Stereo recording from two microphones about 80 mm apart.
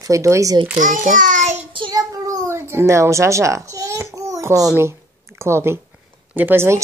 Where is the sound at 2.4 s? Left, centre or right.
Right.